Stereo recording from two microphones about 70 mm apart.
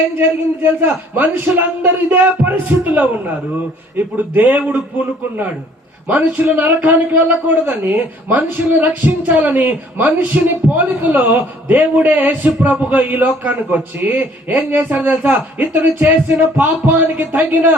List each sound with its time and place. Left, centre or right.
0.6 s speech: right
10.7 s speech: centre
14.9 s speech: centre
15.2 s speech: right